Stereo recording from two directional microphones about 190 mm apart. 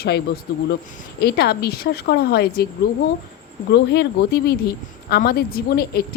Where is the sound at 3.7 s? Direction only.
65° left (ahead or behind).